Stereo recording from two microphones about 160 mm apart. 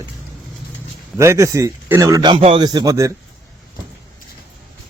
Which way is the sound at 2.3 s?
35° right (ahead or behind).